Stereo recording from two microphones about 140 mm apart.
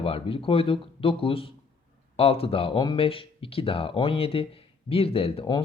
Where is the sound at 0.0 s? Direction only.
40° left (ahead or behind).